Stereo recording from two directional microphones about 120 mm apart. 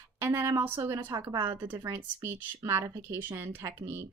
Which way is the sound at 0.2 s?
20° right (ahead or behind).